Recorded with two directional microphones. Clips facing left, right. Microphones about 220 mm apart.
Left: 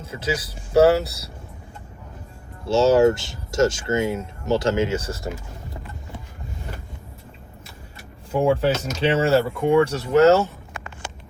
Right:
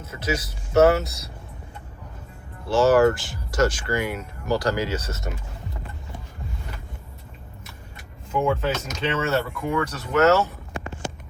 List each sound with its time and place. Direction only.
0.0 s speech: 30° left (ahead or behind)
2.6 s speech: 25° left (ahead or behind)
8.3 s speech: 35° left (ahead or behind)